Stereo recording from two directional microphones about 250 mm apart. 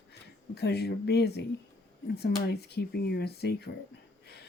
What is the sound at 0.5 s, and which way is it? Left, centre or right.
Speech, left.